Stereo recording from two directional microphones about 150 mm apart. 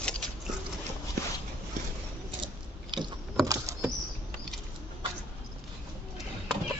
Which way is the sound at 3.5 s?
20° right (ahead or behind).